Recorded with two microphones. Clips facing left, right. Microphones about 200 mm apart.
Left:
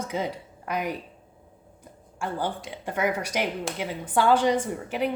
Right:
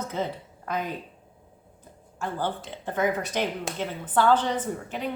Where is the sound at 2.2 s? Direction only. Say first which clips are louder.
Even; 15° left (ahead or behind).